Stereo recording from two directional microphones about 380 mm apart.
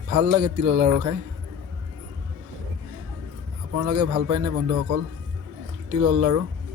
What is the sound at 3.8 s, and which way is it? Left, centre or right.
Speech, right.